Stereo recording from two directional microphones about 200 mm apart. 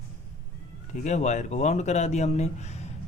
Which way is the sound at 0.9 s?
35° left (ahead or behind).